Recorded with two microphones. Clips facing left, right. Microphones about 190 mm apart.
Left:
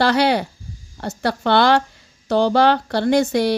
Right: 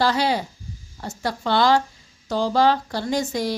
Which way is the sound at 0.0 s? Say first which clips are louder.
Left 4 dB; 70° left (ahead or behind).